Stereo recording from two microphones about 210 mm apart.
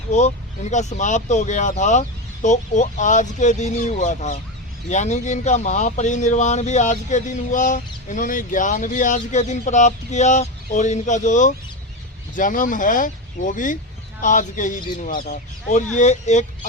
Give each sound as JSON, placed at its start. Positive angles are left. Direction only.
{"t": 0.1, "sound": "speech", "side_deg": 30}